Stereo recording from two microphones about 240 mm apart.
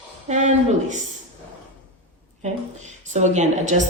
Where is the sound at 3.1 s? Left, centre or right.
Right.